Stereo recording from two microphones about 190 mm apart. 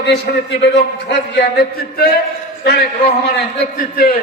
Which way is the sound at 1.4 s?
55° left (ahead or behind).